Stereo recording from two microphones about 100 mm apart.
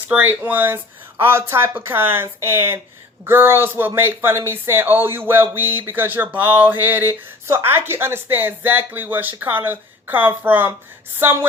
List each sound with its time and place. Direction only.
0.1 s speech: 15° right (ahead or behind)